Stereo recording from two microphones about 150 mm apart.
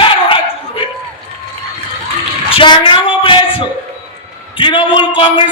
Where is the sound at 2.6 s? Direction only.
35° left (ahead or behind).